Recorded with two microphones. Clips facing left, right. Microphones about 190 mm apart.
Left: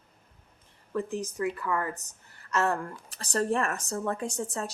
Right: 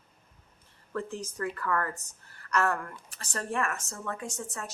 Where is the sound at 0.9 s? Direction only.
15° left (ahead or behind).